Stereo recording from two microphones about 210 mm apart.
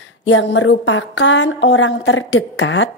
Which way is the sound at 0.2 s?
60° left (ahead or behind).